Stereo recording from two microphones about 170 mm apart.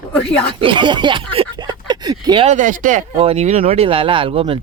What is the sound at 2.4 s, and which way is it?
Speech, 45° right (ahead or behind).